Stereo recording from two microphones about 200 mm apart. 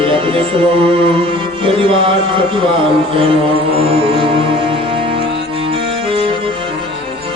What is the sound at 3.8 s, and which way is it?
Music, 30° right (ahead or behind).